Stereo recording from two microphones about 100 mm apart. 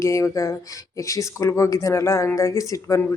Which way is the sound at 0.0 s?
30° left (ahead or behind).